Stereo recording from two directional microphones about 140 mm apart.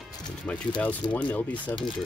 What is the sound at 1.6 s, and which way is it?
Speech, 35° left (ahead or behind).